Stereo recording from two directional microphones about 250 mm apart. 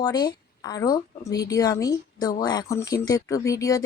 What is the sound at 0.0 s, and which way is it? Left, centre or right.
Speech, centre.